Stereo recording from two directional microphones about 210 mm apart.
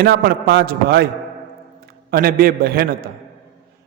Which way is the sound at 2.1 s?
45° right (ahead or behind).